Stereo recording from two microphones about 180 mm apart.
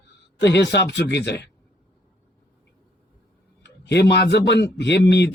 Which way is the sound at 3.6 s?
70° left (ahead or behind).